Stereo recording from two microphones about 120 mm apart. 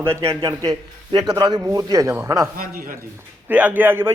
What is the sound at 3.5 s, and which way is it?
Speech, 10° right (ahead or behind).